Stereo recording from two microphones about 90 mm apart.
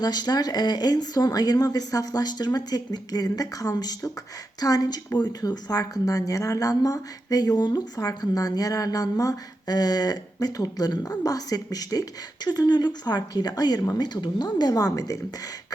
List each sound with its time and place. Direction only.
0.0 s a woman's voice: 50° left (ahead or behind)